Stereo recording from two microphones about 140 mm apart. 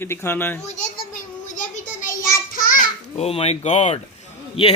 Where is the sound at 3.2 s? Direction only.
45° left (ahead or behind).